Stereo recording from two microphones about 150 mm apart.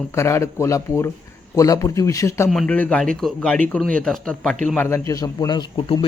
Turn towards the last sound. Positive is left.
turn(degrees=35)  # may be behind; listen again after turning